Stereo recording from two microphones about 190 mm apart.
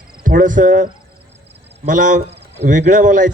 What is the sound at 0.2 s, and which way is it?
A man's voice, 45° right (ahead or behind).